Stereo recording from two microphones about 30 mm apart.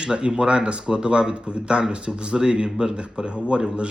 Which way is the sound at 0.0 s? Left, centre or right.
Right.